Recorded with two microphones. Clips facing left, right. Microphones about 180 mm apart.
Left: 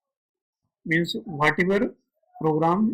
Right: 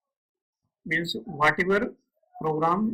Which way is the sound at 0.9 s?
20° left (ahead or behind).